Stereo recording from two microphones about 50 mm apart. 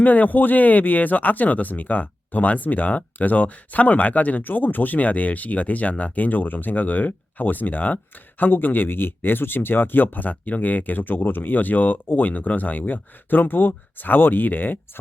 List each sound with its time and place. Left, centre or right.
0.0 s speech: left